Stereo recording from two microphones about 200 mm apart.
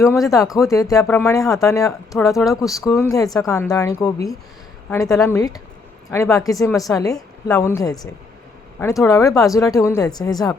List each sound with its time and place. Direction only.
0.0 s speech: 15° left (ahead or behind)